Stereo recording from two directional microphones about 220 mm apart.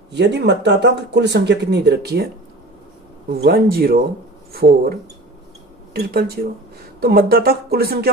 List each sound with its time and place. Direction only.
0.1 s speech: 50° right (ahead or behind)
3.3 s speech: 45° right (ahead or behind)
5.9 s speech: 45° right (ahead or behind)